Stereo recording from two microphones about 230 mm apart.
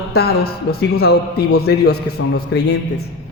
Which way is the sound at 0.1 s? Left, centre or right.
Left.